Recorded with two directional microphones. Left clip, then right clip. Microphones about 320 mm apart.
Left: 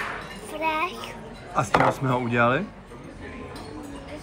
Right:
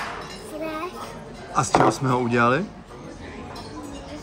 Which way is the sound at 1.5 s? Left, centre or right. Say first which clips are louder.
Right 2 dB; centre.